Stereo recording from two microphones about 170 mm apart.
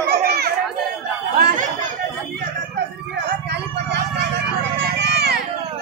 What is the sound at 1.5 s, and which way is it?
Chatter, 50° right (ahead or behind).